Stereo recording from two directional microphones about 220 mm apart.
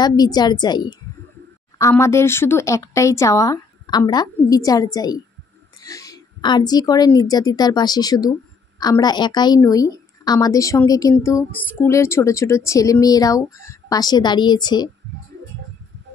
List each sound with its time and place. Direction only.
0.0 s a woman's voice: 20° left (ahead or behind)